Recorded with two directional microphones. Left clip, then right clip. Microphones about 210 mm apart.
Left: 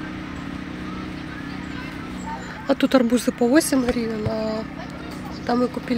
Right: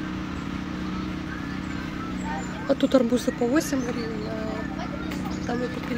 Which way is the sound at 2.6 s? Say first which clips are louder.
Left 3 dB; 15° left (ahead or behind).